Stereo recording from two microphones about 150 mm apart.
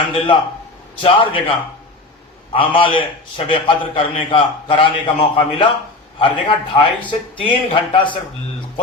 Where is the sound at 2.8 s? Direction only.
35° left (ahead or behind).